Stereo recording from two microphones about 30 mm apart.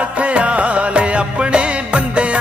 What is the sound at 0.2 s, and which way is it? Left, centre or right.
Music, right.